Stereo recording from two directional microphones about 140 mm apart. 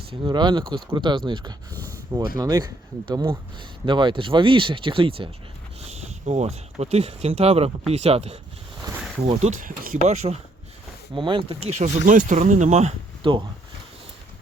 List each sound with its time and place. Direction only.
0.1 s speech: 35° right (ahead or behind)
5.9 s speech: 55° right (ahead or behind)
9.2 s speech: 65° right (ahead or behind)
11.1 s speech: 35° right (ahead or behind); by 13.0 s 55° right (ahead or behind)
13.2 s speech: 35° right (ahead or behind)